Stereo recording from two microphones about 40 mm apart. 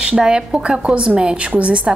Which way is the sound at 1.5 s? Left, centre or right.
Right.